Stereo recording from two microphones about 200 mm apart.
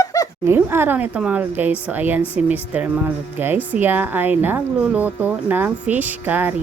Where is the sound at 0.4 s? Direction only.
10° right (ahead or behind).